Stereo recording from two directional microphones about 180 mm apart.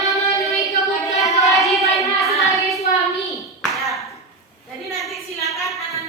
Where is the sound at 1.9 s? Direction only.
Centre (ahead or behind).